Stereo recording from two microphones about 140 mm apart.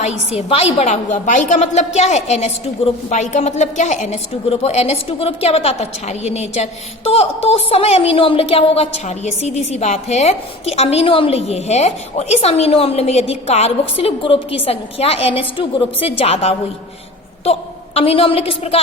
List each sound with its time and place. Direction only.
0.0 s a woman's voice: 50° left (ahead or behind)